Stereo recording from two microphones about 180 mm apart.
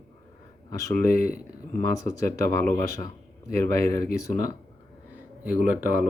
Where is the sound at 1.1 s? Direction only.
55° left (ahead or behind).